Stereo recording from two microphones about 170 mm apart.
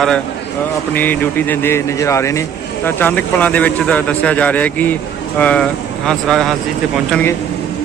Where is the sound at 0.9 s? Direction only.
10° left (ahead or behind).